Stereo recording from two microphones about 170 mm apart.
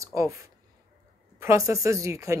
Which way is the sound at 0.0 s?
20° right (ahead or behind).